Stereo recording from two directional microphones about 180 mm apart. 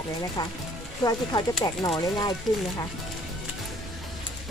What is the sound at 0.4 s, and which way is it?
Speech, 25° left (ahead or behind).